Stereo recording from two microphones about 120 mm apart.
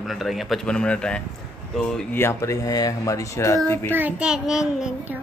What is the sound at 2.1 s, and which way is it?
Speech, 25° left (ahead or behind).